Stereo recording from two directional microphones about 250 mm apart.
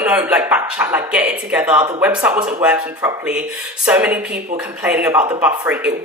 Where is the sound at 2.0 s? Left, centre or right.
Centre.